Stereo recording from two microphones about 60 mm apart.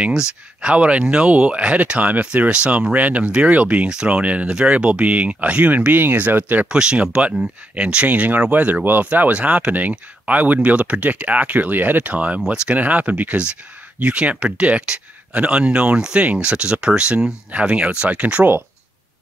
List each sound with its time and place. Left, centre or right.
0.0 s speech: centre; by 6.7 s right
6.7 s speech: centre